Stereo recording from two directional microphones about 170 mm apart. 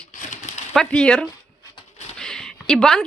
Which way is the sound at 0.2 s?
45° left (ahead or behind).